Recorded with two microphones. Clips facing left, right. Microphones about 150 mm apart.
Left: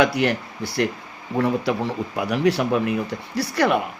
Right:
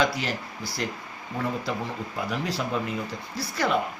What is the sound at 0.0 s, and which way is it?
Speech, 65° left (ahead or behind).